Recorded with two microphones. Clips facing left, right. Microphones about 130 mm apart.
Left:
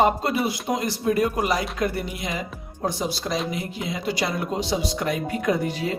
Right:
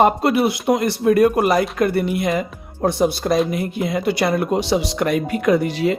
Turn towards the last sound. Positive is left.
turn(degrees=-75)  # may be behind; listen again after turning